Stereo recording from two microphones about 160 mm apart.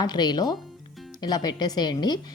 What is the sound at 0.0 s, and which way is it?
Speech, 25° left (ahead or behind).